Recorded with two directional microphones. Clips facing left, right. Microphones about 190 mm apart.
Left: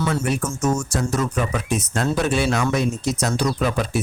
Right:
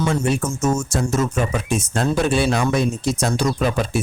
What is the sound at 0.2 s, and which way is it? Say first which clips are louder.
Speech: right 2 dB; 25° right (ahead or behind).